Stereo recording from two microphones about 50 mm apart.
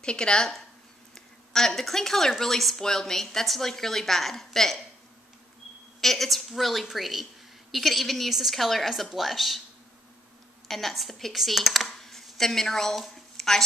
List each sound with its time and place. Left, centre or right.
0.0 s a woman's voice: centre
5.9 s a woman's voice: centre
10.7 s speech: centre
13.0 s a sound: centre